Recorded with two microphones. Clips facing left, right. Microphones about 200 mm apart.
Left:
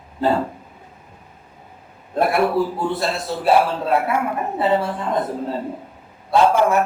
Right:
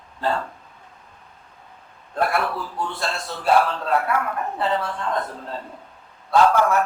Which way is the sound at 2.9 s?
5° left (ahead or behind).